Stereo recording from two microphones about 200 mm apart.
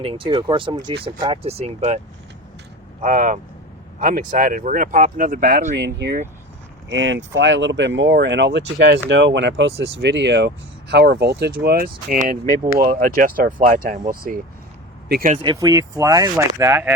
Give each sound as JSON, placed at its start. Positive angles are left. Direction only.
{"t": 0.0, "sound": "speech", "side_deg": -25}
{"t": 3.0, "sound": "speech", "side_deg": -40}
{"t": 15.4, "sound": "speech", "side_deg": -20}